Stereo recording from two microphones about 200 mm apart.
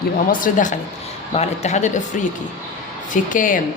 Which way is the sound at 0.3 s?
40° left (ahead or behind).